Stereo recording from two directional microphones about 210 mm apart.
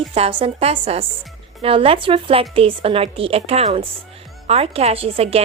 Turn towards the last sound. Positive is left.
turn(degrees=-25)  # may be behind; listen again after turning